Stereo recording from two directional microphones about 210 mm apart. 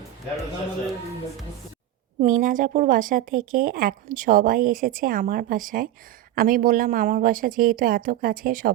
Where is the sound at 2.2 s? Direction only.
40° right (ahead or behind).